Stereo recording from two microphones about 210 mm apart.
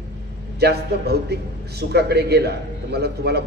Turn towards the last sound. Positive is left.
turn(degrees=-50)  # may be behind; listen again after turning